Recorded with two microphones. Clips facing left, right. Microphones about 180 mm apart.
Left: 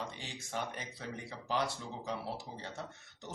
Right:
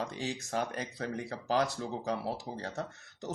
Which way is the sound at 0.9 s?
70° right (ahead or behind).